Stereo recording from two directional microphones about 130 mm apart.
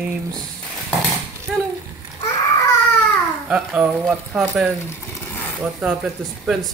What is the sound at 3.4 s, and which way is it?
Speech, 10° right (ahead or behind).